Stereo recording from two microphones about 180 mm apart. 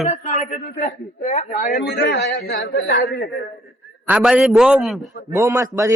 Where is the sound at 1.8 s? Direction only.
60° left (ahead or behind).